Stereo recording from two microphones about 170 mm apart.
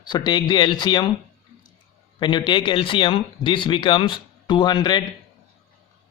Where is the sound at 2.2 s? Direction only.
30° left (ahead or behind).